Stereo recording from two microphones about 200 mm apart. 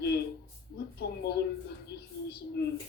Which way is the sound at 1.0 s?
50° left (ahead or behind).